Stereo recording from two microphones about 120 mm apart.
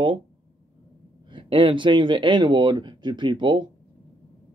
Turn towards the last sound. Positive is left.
turn(degrees=-40)  # may be behind; listen again after turning